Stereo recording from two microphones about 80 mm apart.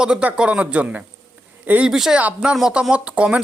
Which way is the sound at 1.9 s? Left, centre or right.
Centre.